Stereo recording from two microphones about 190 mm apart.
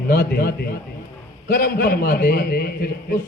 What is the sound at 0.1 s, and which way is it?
A man's voice, 55° left (ahead or behind).